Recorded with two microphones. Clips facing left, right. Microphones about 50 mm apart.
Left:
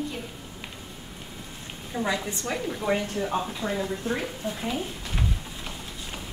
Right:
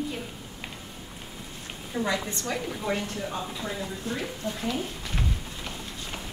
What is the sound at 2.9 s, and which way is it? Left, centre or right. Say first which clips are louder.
Speech: left 6 dB; left.